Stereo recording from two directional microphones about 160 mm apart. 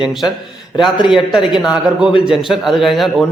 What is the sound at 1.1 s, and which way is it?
A man's voice, centre (ahead or behind).